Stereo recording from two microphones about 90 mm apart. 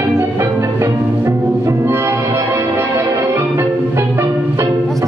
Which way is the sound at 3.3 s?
25° right (ahead or behind).